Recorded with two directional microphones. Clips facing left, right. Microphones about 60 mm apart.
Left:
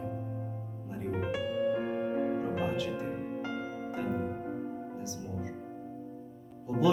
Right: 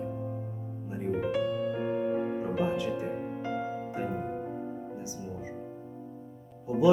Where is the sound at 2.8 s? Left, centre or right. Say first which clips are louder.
Right 2 dB; right.